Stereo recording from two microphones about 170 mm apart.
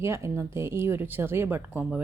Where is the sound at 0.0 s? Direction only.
15° right (ahead or behind).